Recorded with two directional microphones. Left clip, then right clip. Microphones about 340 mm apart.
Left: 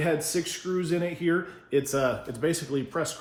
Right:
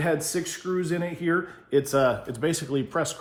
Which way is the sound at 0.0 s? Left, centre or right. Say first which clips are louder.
Right 1 dB; centre.